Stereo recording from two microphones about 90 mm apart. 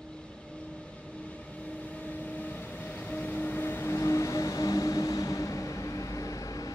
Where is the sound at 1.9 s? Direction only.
20° left (ahead or behind).